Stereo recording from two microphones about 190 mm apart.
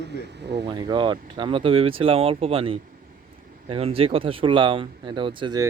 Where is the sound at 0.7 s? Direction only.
25° right (ahead or behind).